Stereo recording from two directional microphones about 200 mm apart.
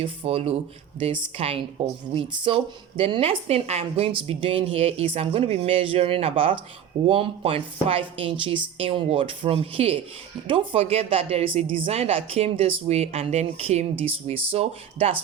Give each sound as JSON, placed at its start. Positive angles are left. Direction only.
{"t": 0.0, "sound": "speech", "side_deg": -30}